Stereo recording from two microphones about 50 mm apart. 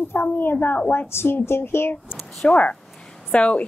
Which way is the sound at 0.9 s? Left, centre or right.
Left.